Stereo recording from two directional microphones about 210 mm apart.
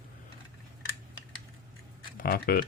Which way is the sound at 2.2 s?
45° left (ahead or behind).